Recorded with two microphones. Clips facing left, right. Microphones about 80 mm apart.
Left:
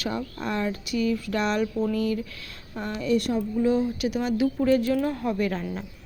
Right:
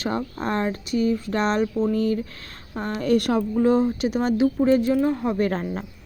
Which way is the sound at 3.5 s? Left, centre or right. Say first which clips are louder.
Right 4 dB; right.